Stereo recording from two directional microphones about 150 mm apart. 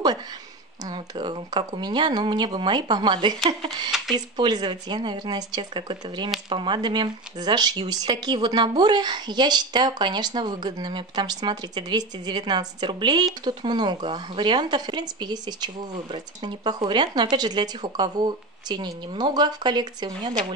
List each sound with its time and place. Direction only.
0.8 s speech: 30° right (ahead or behind)
4.4 s speech: 30° right (ahead or behind)